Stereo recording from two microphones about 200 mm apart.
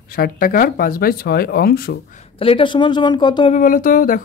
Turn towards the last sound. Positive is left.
turn(degrees=45)  # may be behind; listen again after turning